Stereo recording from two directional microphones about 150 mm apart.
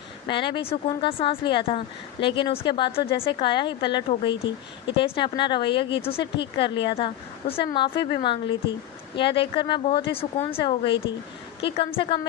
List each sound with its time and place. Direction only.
0.3 s speech: 35° left (ahead or behind)